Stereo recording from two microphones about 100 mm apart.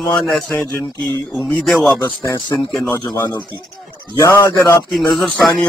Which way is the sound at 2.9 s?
40° left (ahead or behind).